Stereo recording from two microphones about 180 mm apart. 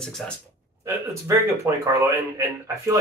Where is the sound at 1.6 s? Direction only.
15° right (ahead or behind).